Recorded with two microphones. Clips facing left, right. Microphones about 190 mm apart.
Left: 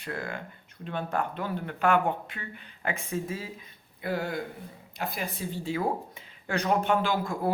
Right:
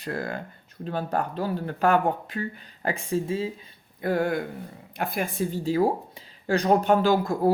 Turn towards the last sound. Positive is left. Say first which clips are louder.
# right 7 dB
turn(degrees=-35)  # may be behind; listen again after turning